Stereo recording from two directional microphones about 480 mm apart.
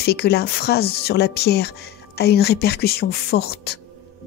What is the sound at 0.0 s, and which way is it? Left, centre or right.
Speech, centre.